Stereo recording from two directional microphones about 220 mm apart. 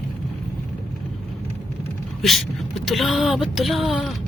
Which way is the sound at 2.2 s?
Centre (ahead or behind).